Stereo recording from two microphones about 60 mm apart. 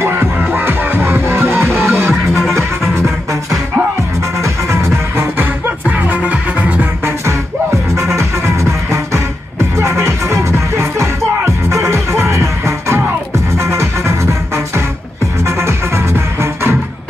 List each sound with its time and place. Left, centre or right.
0.0 s music: right
2.0 s music: centre
4.4 s music: right
5.4 s music: right
9.8 s music: right
15.4 s music: right